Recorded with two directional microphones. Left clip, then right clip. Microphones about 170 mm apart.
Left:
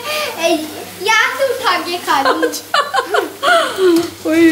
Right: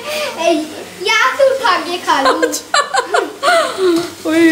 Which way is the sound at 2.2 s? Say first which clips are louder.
Right 1 dB; centre (ahead or behind).